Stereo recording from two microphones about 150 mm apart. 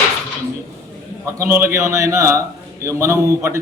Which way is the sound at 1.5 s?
15° right (ahead or behind).